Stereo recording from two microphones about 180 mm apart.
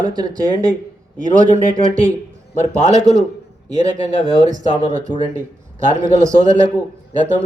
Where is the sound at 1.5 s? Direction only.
45° right (ahead or behind).